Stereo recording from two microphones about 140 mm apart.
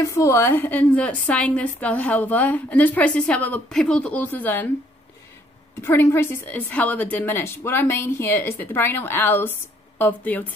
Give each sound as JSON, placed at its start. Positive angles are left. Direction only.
{"t": 0.0, "sound": "a woman's voice", "side_deg": 20}
{"t": 5.8, "sound": "a woman's voice", "side_deg": 20}